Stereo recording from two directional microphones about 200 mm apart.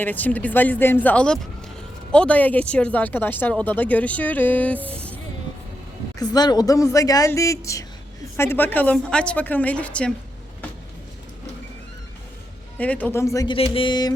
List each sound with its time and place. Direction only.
0.0 s speech: 10° left (ahead or behind)
6.1 s speech: 20° left (ahead or behind)
12.7 s speech: 5° left (ahead or behind)
13.6 s music: 25° left (ahead or behind)